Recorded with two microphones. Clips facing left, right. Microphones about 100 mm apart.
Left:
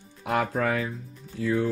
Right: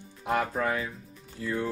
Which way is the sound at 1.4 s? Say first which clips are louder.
Left 6 dB; 90° left.